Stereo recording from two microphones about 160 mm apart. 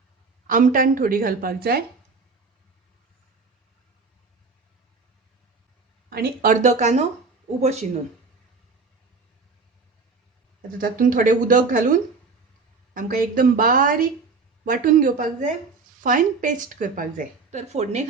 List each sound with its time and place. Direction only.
0.4 s a woman's voice: 60° right (ahead or behind)
6.1 s speech: 75° right (ahead or behind); by 7.9 s 45° right (ahead or behind)
10.8 s a woman's voice: 60° right (ahead or behind)
17.5 s speech: 45° right (ahead or behind)